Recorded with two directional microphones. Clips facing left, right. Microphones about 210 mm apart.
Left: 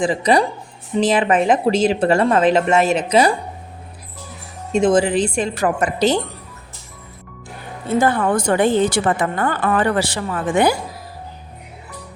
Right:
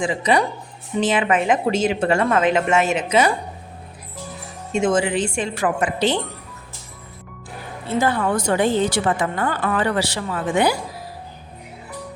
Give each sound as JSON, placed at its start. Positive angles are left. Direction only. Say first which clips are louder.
{"t": 0.0, "sound": "a woman's voice", "louder": "left 3 dB", "side_deg": 35}
{"t": 4.7, "sound": "a woman's voice", "louder": "left 4 dB", "side_deg": 35}
{"t": 7.9, "sound": "a woman's voice", "louder": "left 3 dB", "side_deg": 50}